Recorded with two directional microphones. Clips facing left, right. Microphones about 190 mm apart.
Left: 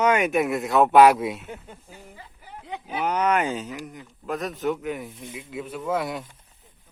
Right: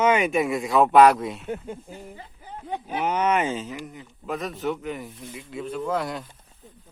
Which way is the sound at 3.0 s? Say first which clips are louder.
Even; 5° right (ahead or behind).